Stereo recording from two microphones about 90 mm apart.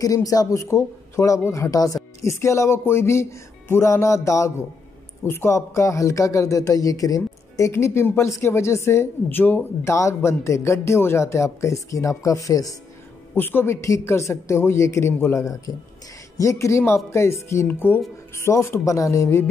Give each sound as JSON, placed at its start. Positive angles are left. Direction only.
{"t": 0.0, "sound": "a man's voice", "side_deg": 40}
{"t": 9.8, "sound": "a man's voice", "side_deg": 35}
{"t": 13.3, "sound": "a man's voice", "side_deg": 25}